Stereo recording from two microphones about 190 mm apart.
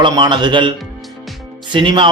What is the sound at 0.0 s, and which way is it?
Speech, 25° right (ahead or behind).